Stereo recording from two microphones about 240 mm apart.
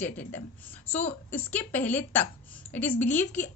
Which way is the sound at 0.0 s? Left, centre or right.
Centre.